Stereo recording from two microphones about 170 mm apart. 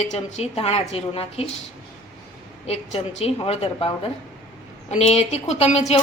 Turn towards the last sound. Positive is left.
turn(degrees=40)  # may be behind; listen again after turning